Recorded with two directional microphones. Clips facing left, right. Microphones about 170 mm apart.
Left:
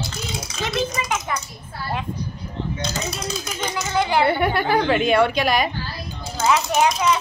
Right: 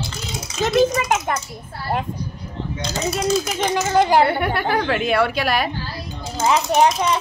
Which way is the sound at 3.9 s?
40° right (ahead or behind).